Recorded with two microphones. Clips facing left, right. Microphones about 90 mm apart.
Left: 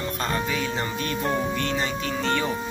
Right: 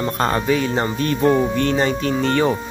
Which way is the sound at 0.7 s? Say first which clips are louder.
Right 7 dB; 40° right (ahead or behind).